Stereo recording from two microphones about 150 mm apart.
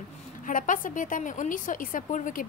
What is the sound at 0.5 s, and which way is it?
A woman's voice, 65° left (ahead or behind).